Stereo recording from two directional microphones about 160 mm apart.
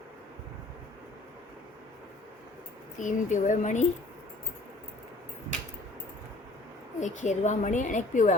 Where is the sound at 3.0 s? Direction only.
50° left (ahead or behind).